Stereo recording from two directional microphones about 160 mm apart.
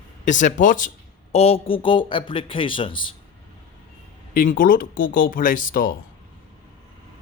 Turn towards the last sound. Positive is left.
turn(degrees=60)  # may be behind; listen again after turning